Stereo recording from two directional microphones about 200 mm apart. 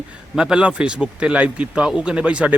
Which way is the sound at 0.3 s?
5° right (ahead or behind).